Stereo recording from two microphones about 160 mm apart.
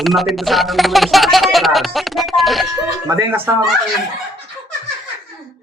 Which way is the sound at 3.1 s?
20° right (ahead or behind).